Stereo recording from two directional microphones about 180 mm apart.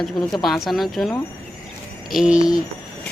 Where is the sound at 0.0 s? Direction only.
Centre (ahead or behind).